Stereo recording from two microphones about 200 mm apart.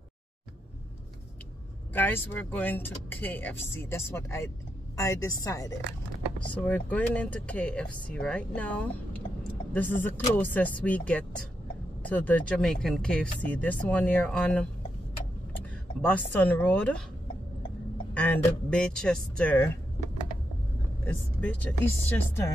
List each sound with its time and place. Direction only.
2.0 s speech: 10° left (ahead or behind)
16.0 s speech: 5° left (ahead or behind)
18.1 s speech: 10° left (ahead or behind)
21.0 s speech: 10° left (ahead or behind)